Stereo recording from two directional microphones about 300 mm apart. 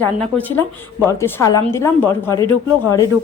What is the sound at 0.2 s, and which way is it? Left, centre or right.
A woman's voice, centre.